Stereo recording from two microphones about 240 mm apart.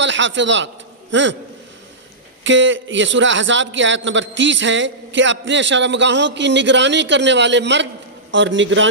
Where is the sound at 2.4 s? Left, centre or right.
Right.